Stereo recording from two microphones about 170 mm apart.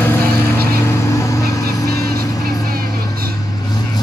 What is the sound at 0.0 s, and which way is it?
Vehicle, 10° left (ahead or behind).